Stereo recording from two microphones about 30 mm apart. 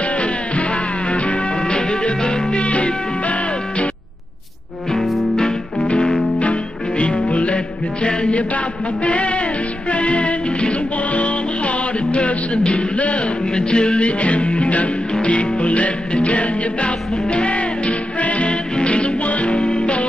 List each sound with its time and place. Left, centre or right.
1.1 s music: left
1.7 s music: left
2.6 s music: left
4.9 s music: centre
5.8 s music: left
13.6 s music: left
14.0 s music: left
19.5 s music: left